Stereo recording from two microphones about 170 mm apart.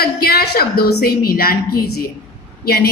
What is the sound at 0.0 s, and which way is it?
A woman's voice, 65° left (ahead or behind).